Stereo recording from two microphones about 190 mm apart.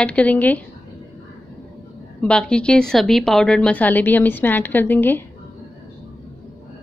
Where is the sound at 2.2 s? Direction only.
5° left (ahead or behind).